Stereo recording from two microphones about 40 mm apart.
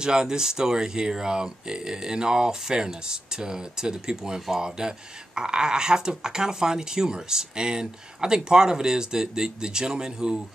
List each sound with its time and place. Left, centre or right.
0.0 s speech: centre